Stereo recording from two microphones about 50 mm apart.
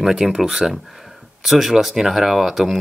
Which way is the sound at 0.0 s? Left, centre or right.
Centre.